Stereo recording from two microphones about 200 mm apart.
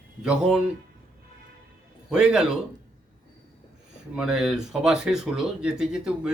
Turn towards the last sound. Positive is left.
turn(degrees=-5)  # may be behind; listen again after turning